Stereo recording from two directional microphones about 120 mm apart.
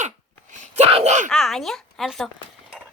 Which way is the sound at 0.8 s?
60° right (ahead or behind).